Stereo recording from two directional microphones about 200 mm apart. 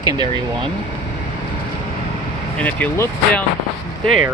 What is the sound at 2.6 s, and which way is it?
Speech, 5° left (ahead or behind).